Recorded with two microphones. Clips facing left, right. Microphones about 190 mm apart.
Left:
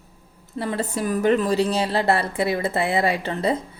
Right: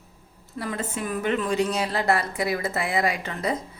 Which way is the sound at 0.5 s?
30° left (ahead or behind).